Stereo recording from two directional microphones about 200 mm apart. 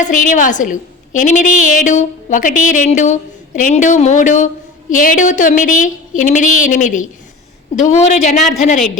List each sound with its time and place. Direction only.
0.0 s a woman's voice: 40° left (ahead or behind)